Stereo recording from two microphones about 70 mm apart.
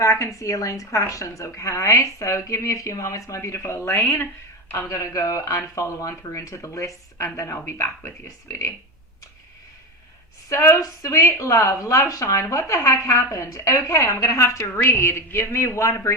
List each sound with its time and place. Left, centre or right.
0.0 s a woman's voice: left
4.0 s speech: left
4.9 s a woman's voice: left
10.5 s a woman's voice: left